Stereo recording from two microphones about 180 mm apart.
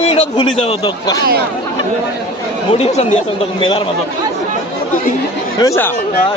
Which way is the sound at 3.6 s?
30° left (ahead or behind).